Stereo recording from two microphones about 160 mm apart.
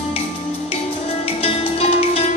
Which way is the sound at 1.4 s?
40° left (ahead or behind).